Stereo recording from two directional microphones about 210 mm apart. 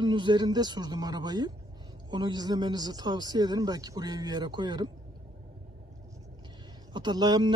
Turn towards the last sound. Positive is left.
turn(degrees=-20)  # may be behind; listen again after turning